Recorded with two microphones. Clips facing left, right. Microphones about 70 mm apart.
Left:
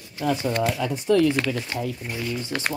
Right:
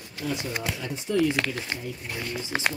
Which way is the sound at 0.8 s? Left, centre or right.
Left.